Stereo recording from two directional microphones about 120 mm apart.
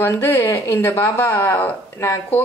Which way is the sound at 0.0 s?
20° left (ahead or behind).